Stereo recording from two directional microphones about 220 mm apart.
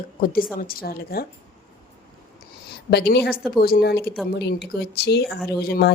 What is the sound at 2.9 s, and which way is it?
Speech, 50° left (ahead or behind).